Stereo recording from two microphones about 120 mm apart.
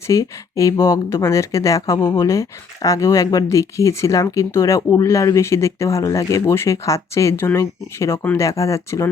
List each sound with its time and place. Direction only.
0.1 s speech: 25° left (ahead or behind)